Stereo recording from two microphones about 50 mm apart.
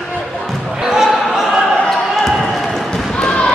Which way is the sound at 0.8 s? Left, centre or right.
Centre.